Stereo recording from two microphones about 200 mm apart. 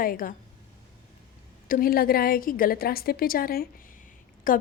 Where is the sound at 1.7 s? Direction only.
45° left (ahead or behind).